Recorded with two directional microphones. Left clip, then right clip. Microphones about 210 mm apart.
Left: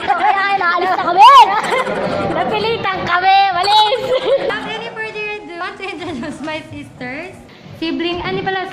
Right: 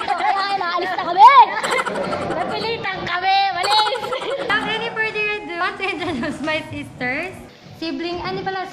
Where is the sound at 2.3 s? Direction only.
20° left (ahead or behind).